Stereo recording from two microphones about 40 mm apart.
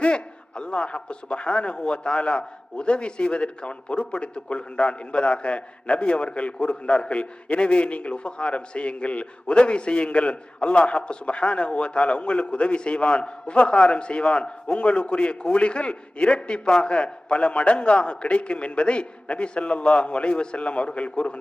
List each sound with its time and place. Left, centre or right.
0.0 s a man's voice: left